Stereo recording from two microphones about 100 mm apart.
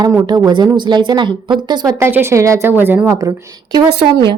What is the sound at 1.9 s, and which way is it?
A woman's voice, 25° right (ahead or behind).